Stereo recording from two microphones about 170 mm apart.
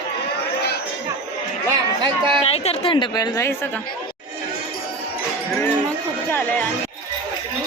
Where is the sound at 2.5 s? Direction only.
35° left (ahead or behind); by 3.6 s 20° left (ahead or behind).